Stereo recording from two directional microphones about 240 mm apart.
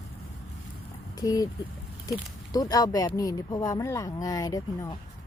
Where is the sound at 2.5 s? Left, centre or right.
Centre.